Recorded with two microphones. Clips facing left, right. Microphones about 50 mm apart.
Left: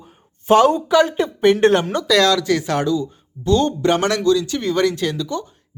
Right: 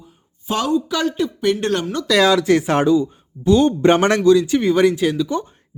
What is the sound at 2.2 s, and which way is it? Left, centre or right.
Speech, centre.